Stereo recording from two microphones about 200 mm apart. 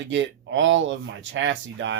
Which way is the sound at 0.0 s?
65° right (ahead or behind).